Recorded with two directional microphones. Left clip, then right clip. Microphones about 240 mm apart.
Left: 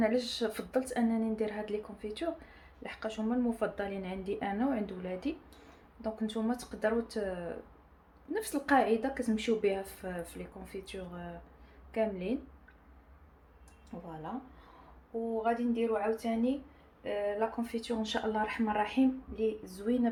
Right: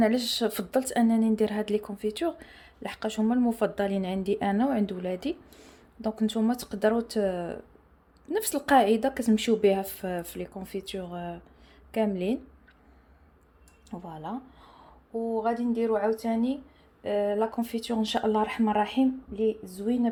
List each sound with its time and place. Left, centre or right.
0.0 s a woman's voice: right
13.9 s speech: right
15.4 s speech: right
19.4 s speech: right